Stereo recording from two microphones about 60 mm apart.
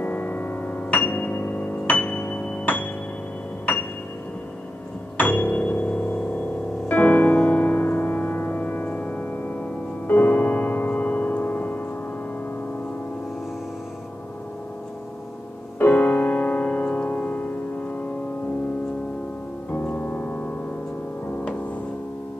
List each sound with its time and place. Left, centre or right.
0.0 s music: left
5.1 s music: left
10.0 s piano: left
15.8 s music: left
19.8 s keyboard: left